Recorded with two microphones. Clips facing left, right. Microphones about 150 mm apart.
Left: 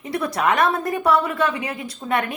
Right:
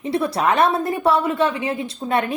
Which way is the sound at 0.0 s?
30° right (ahead or behind).